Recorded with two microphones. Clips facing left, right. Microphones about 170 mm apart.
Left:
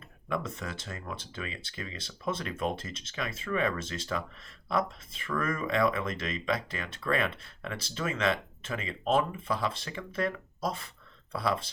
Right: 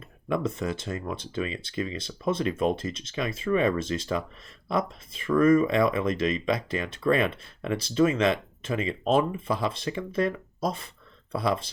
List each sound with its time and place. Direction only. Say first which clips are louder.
0.3 s speech: right 7 dB; 20° right (ahead or behind)